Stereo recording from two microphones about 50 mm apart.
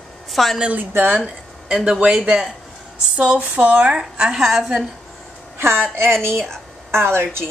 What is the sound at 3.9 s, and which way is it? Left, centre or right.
Speech, centre.